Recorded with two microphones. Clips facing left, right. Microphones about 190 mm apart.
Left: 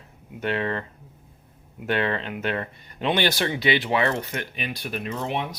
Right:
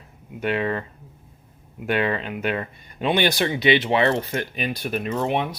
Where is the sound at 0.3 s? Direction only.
15° right (ahead or behind).